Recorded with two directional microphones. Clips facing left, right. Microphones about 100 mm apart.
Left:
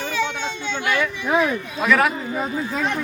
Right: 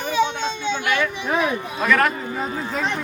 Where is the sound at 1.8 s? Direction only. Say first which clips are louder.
Left 1 dB; 5° left (ahead or behind).